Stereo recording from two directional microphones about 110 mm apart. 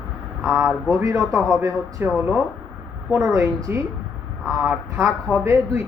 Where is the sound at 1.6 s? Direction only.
25° right (ahead or behind).